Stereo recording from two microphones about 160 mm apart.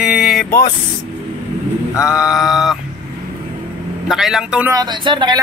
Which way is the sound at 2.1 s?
5° right (ahead or behind).